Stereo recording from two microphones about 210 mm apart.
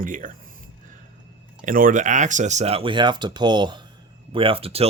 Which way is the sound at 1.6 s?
40° right (ahead or behind).